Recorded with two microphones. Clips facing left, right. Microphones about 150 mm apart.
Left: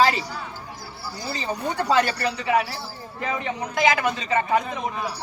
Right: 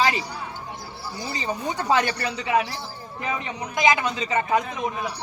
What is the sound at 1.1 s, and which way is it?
Speech, 15° right (ahead or behind).